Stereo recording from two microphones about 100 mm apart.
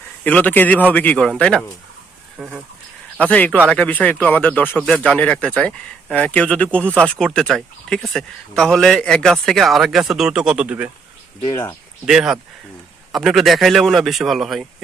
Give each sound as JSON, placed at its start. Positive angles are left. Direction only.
{"t": 0.3, "sound": "speech", "side_deg": 15}
{"t": 2.4, "sound": "speech", "side_deg": -5}
{"t": 3.2, "sound": "speech", "side_deg": 15}
{"t": 4.8, "sound": "a man's voice", "side_deg": 5}
{"t": 11.4, "sound": "speech", "side_deg": 30}
{"t": 12.0, "sound": "a man's voice", "side_deg": -5}